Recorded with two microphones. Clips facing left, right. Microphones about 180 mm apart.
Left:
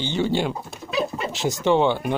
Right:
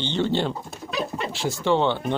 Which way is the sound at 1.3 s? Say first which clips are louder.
Left 2 dB; 20° left (ahead or behind).